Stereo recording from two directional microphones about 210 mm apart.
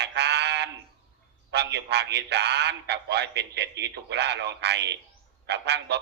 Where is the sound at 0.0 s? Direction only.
55° right (ahead or behind).